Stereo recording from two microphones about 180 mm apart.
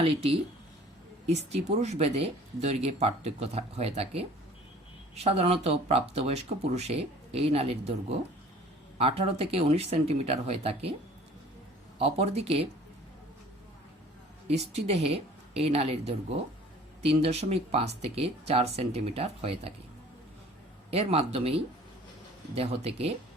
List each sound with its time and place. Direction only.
0.0 s speech: 30° right (ahead or behind)
9.0 s speech: 35° right (ahead or behind)
11.9 s speech: 35° right (ahead or behind)
14.4 s speech: 35° right (ahead or behind)
20.9 s speech: 35° right (ahead or behind)